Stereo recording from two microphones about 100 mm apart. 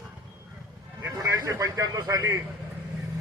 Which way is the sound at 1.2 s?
35° right (ahead or behind).